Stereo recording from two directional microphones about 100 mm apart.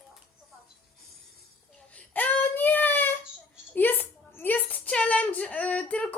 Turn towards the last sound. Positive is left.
turn(degrees=15)  # may be behind; listen again after turning